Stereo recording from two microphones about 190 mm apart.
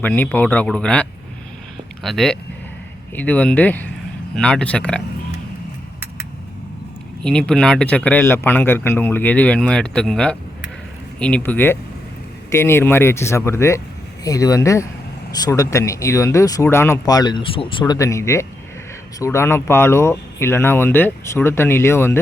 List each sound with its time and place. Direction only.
0.0 s speech: 10° left (ahead or behind)
2.0 s speech: centre (ahead or behind)
7.2 s speech: 5° left (ahead or behind)